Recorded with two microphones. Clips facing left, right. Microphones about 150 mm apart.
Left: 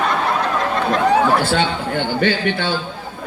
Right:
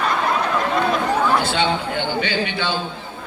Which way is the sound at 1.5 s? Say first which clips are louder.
Left 2 dB; 45° left (ahead or behind).